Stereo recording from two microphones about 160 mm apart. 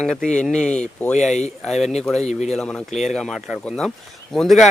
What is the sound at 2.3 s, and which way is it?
Speech, 45° left (ahead or behind).